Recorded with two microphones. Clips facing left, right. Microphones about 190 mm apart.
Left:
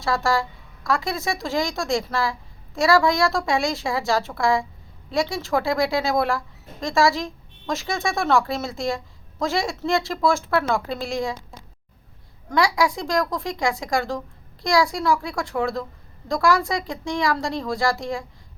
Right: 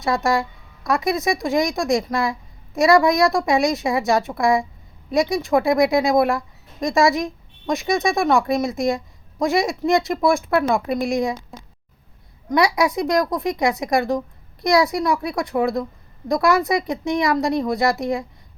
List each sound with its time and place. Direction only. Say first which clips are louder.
0.0 s a woman's voice: right 2 dB; 20° right (ahead or behind)
12.5 s a woman's voice: right 3 dB; 20° right (ahead or behind)